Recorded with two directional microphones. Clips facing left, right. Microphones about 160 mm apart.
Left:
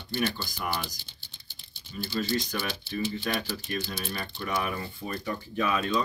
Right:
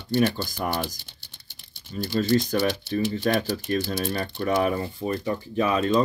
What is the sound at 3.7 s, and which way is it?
Speech, 40° right (ahead or behind).